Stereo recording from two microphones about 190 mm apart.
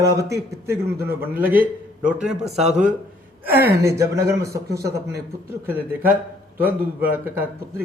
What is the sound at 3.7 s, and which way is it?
Speech, 15° right (ahead or behind).